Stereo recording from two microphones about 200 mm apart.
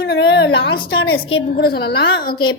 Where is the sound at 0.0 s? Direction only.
55° left (ahead or behind); by 1.2 s 70° left (ahead or behind).